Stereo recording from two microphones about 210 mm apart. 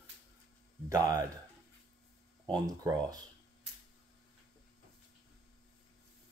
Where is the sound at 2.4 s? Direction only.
15° right (ahead or behind).